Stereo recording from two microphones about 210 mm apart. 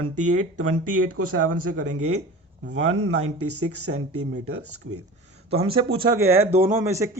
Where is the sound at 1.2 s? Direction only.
90° right.